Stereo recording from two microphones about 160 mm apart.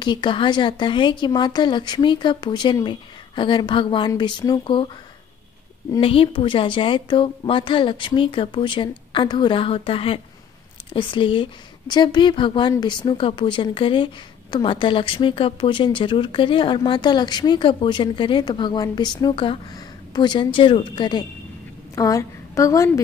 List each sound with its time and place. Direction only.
0.0 s speech: 30° left (ahead or behind)
5.9 s a woman's voice: 35° left (ahead or behind)